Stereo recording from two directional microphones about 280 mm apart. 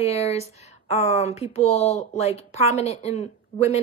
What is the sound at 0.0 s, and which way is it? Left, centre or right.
Speech, left.